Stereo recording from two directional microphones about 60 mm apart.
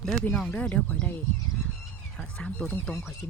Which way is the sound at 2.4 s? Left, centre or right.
Centre.